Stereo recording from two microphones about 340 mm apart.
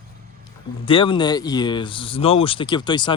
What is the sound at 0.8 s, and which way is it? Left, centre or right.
Speech, centre.